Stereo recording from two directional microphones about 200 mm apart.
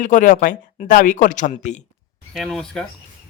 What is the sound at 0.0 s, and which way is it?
Speech, 40° left (ahead or behind).